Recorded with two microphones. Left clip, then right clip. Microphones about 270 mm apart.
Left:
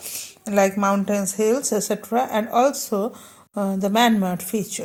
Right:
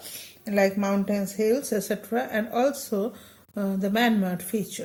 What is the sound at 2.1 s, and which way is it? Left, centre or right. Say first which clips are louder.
Speech: left 8 dB; centre.